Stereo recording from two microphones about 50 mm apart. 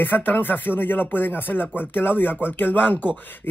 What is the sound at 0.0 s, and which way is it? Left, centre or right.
Speech, left.